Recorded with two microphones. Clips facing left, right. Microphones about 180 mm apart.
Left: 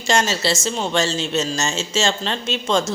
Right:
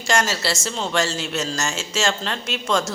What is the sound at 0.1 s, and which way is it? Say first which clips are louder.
A woman's voice: left 2 dB; 20° left (ahead or behind).